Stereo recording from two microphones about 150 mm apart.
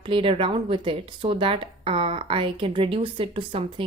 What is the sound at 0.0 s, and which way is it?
Speech, 35° right (ahead or behind).